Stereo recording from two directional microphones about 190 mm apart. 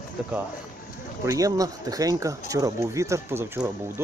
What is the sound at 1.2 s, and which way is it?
Speech, 15° right (ahead or behind).